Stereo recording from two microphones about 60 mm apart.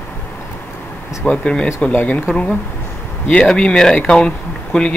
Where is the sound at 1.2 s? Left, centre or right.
Centre.